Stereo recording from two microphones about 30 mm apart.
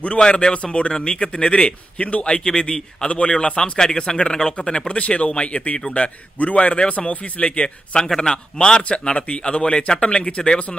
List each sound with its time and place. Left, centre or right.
0.2 s speech: left
2.2 s a man's voice: left
3.7 s a man's voice: left
4.9 s a man's voice: left
7.6 s a man's voice: left